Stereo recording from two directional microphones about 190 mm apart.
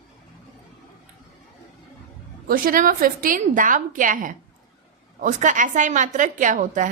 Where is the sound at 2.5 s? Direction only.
45° right (ahead or behind).